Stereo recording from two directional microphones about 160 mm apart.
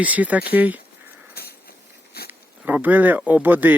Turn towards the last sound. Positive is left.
turn(degrees=-10)  # may be behind; listen again after turning